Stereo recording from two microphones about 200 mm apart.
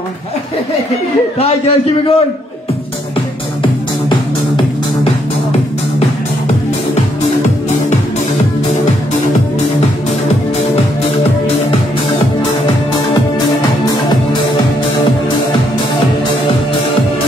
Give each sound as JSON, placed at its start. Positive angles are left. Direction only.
{"t": 1.4, "sound": "a man's voice", "side_deg": 30}